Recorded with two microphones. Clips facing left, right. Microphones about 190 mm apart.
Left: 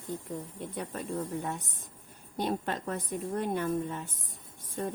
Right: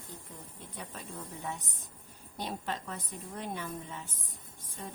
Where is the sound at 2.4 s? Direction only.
50° left (ahead or behind).